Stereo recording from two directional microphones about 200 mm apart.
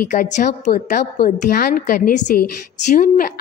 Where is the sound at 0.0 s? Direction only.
40° left (ahead or behind).